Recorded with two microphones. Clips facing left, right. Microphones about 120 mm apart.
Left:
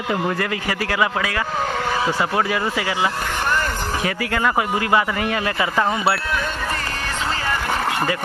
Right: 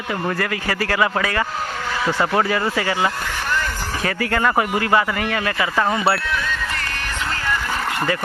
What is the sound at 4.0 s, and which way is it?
Speech, 10° left (ahead or behind).